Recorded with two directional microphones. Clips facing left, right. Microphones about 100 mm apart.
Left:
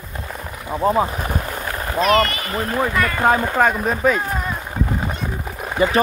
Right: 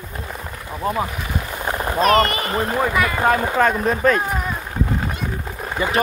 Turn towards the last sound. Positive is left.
turn(degrees=10)  # may be behind; listen again after turning